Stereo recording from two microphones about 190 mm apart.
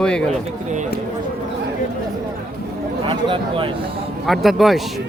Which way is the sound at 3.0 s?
25° right (ahead or behind).